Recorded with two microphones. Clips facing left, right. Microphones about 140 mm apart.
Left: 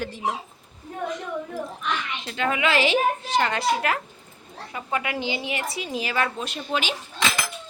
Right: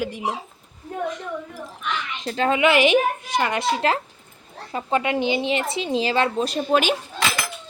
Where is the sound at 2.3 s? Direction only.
35° right (ahead or behind).